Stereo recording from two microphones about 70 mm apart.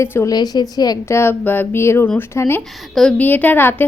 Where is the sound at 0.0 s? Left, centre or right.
Left.